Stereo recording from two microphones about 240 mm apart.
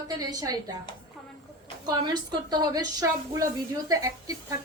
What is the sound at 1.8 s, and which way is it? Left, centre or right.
A woman's voice, centre.